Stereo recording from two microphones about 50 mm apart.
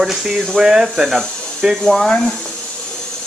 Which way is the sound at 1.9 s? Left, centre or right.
Centre.